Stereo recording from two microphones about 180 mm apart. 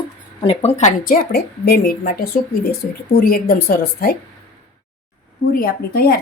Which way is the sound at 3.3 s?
60° left (ahead or behind).